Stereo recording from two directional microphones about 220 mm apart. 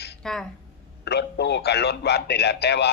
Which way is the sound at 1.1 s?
50° left (ahead or behind).